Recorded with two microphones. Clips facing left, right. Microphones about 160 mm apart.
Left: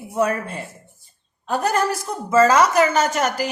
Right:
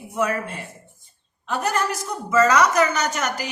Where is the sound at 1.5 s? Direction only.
35° left (ahead or behind).